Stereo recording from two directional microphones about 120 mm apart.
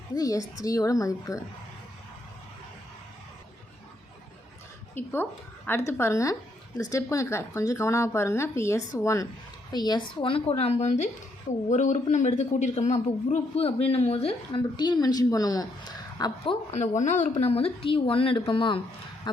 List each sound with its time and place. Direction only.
0.2 s speech: 30° left (ahead or behind)
4.9 s a man's voice: 15° left (ahead or behind); by 14.6 s 55° left (ahead or behind)
14.8 s a woman's voice: 35° left (ahead or behind)
16.7 s speech: 90° left; by 18.8 s 45° left (ahead or behind)